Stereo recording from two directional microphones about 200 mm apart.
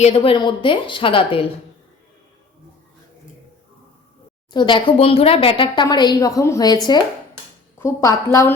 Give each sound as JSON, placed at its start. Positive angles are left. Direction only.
{"t": 0.0, "sound": "a woman's voice", "side_deg": 30}
{"t": 4.5, "sound": "a woman's voice", "side_deg": 25}
{"t": 7.8, "sound": "a woman's voice", "side_deg": 15}